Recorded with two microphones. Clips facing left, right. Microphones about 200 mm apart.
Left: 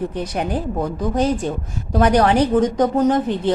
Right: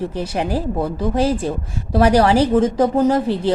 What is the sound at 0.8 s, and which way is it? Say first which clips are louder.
Speech: even; 5° right (ahead or behind).